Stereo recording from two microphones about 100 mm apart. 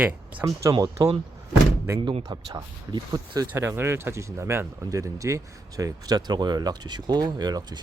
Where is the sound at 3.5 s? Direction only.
25° right (ahead or behind).